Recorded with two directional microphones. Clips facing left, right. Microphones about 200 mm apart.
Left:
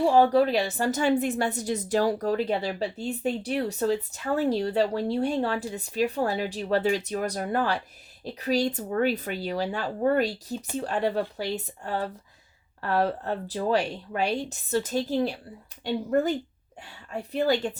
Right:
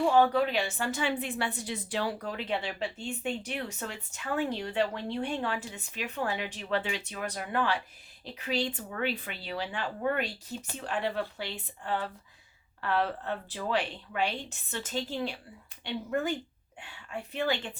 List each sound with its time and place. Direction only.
0.0 s a woman's voice: 35° left (ahead or behind)